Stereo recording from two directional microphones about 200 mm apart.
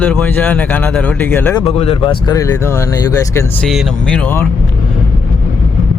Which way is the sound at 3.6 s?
Centre (ahead or behind).